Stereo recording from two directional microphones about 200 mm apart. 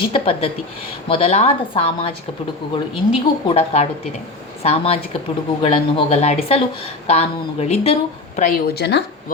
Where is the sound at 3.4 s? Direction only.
30° left (ahead or behind).